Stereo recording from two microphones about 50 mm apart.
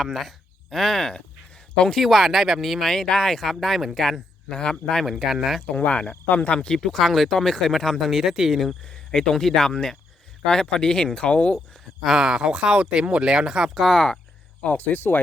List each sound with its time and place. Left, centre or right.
0.0 s speech: centre
2.0 s speech: centre
2.9 s speech: centre
4.4 s speech: centre
5.0 s speech: centre
5.6 s speech: left
6.5 s speech: centre
6.7 s speech: centre
8.8 s speech: centre
12.0 s speech: centre
13.7 s speech: centre
14.8 s speech: left